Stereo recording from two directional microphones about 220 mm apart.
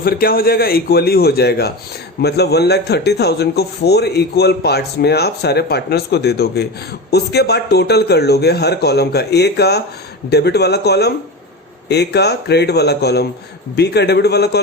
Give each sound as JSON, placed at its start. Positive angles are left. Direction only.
{"t": 0.0, "sound": "a man's voice", "side_deg": 45}